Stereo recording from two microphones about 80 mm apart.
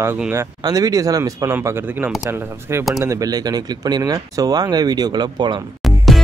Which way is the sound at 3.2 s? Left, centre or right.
Right.